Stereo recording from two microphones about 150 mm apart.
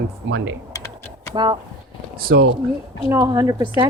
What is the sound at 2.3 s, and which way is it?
Speech, 90° right.